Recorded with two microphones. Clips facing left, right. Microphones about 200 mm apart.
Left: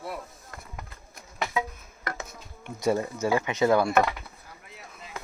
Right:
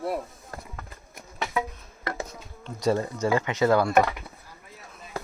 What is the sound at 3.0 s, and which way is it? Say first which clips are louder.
Speech: right 1 dB; 10° left (ahead or behind).